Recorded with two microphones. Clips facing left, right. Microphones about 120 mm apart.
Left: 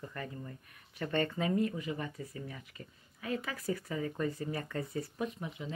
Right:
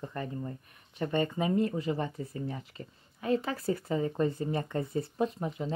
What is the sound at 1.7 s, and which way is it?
Speech, 35° right (ahead or behind).